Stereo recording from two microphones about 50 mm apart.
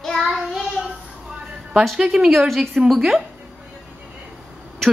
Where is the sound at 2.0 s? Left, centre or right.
Centre.